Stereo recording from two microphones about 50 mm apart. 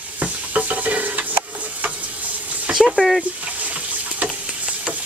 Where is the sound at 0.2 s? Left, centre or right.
Right.